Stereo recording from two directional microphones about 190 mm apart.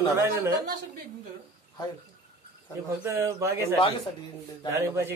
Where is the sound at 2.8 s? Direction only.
15° right (ahead or behind).